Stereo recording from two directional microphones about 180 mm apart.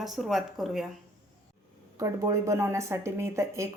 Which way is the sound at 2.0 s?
15° right (ahead or behind).